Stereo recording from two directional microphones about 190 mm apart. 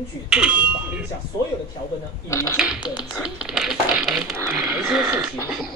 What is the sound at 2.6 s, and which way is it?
Speech, 5° right (ahead or behind).